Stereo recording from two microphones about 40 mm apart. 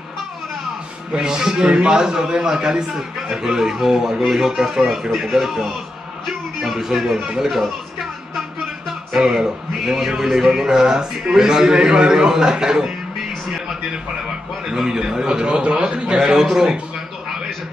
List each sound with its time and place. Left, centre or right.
1.2 s speech: centre
6.2 s music: centre
6.8 s speech: centre
9.1 s speech: centre
14.7 s a man's voice: centre
16.2 s speech: centre